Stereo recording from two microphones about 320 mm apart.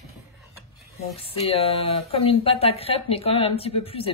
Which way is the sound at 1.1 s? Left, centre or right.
Centre.